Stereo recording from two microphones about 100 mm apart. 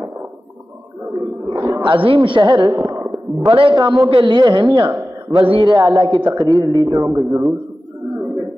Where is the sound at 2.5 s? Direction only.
35° right (ahead or behind).